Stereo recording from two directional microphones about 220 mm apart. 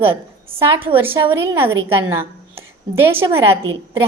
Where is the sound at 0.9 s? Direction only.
10° right (ahead or behind).